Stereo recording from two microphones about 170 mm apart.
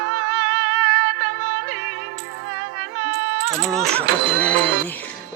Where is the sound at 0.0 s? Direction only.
90° right.